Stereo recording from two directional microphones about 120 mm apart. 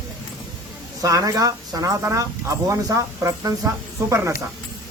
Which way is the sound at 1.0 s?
30° right (ahead or behind).